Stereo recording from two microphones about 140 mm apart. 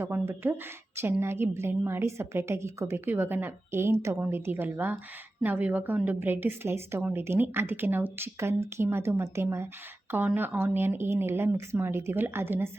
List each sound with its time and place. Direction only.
0.0 s a woman's voice: 15° right (ahead or behind)